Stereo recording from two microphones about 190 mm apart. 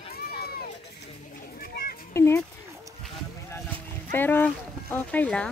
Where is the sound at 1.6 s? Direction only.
50° left (ahead or behind).